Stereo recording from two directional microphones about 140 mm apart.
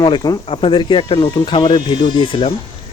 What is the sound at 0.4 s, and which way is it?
Speech, 40° left (ahead or behind).